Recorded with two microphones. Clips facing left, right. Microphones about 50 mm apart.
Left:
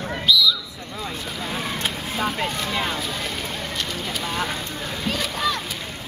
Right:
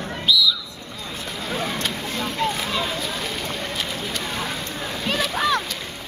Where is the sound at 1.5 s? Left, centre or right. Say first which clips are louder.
Right 2 dB; centre.